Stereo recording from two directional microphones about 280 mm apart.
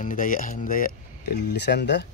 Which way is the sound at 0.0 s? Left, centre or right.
Left.